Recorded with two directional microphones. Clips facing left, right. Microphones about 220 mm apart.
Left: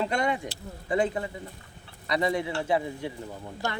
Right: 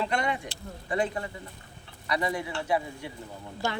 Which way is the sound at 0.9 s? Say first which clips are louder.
Left 3 dB; 25° left (ahead or behind).